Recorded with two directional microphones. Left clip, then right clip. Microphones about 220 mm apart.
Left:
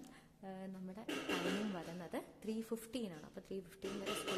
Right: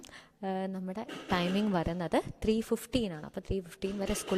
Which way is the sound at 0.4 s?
40° right (ahead or behind).